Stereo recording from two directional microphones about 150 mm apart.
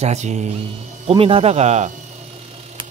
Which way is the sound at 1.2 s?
40° right (ahead or behind).